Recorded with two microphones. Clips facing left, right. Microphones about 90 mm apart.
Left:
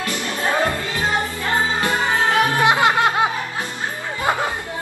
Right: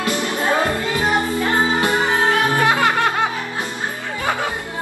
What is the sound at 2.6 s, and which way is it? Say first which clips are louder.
Music: left 1 dB; 20° left (ahead or behind).